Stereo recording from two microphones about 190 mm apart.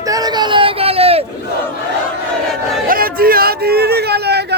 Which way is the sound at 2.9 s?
50° right (ahead or behind).